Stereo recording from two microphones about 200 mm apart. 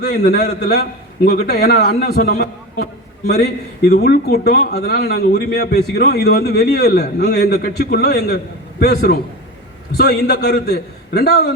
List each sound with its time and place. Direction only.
0.0 s a man's voice: 55° left (ahead or behind)